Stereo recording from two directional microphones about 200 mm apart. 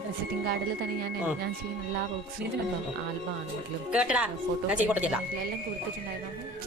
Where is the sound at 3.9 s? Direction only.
5° right (ahead or behind).